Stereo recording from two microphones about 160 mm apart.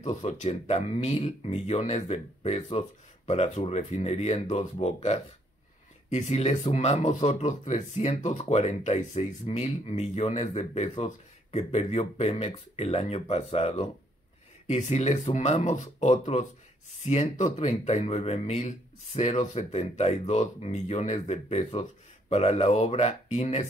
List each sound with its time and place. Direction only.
0.0 s speech: 45° left (ahead or behind)